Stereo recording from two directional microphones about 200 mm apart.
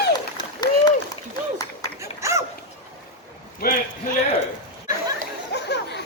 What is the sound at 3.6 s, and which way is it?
Basketball bounce, 50° left (ahead or behind).